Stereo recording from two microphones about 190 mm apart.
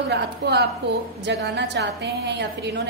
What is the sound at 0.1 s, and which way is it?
A woman's voice, 60° right (ahead or behind).